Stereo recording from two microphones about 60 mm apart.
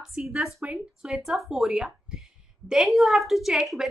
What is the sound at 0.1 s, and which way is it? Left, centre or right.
A woman's voice, centre.